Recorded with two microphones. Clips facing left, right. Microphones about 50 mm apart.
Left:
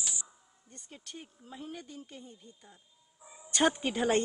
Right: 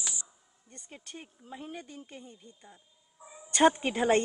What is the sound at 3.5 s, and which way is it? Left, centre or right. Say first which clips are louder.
Speech: right 4 dB; centre.